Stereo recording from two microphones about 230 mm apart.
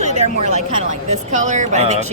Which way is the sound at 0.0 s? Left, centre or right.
Right.